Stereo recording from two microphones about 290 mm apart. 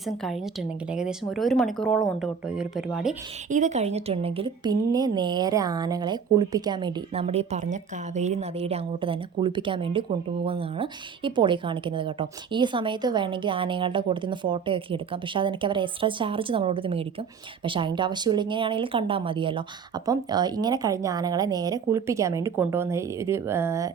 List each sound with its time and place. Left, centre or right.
1.4 s speech: centre
3.5 s a woman's voice: right